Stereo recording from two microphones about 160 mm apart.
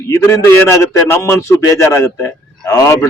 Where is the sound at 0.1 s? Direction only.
15° left (ahead or behind).